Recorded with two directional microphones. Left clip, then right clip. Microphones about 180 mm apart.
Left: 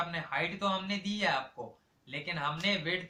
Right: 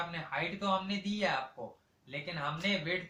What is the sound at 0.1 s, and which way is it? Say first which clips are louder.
Speech: left 3 dB; 15° left (ahead or behind).